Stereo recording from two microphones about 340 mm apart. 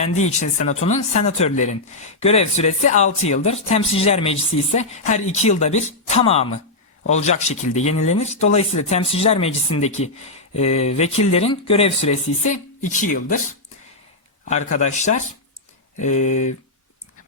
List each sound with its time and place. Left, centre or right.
0.0 s speech: centre
14.4 s speech: left